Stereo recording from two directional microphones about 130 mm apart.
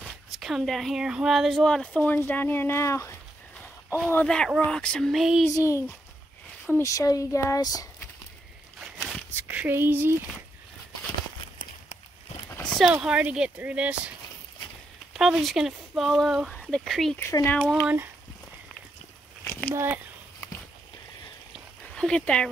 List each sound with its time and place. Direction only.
0.0 s speech: centre (ahead or behind); by 3.2 s 20° left (ahead or behind)
4.1 s speech: 10° left (ahead or behind)
5.5 s a child's voice: 25° left (ahead or behind)
9.3 s a sound: 15° right (ahead or behind)
12.6 s clip-clop: centre (ahead or behind)
12.9 s speech: 10° right (ahead or behind)
15.1 s speech: centre (ahead or behind)
17.2 s a child's voice: 25° left (ahead or behind)
17.6 s speech: 5° right (ahead or behind)
19.4 s a sound: 20° left (ahead or behind)
19.7 s speech: 20° right (ahead or behind)
21.9 s speech: 5° left (ahead or behind)